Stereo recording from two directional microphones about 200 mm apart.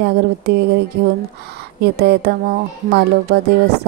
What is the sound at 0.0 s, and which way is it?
Speech, 55° right (ahead or behind).